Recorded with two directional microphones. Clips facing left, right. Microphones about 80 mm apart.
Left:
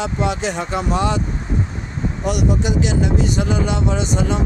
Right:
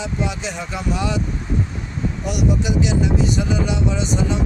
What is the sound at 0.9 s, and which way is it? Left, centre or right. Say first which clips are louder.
Speech: left 3 dB; left.